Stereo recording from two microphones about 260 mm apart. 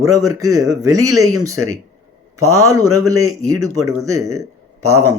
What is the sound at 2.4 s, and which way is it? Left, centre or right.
A man's voice, centre.